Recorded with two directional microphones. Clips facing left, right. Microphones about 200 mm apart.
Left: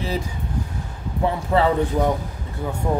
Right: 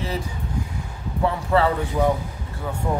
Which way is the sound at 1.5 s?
20° left (ahead or behind).